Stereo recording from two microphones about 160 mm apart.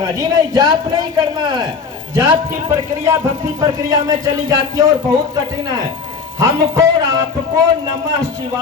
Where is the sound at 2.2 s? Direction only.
20° right (ahead or behind).